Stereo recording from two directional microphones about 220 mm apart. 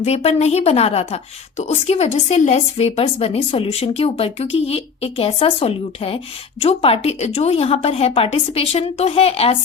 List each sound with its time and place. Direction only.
0.0 s speech: 30° left (ahead or behind)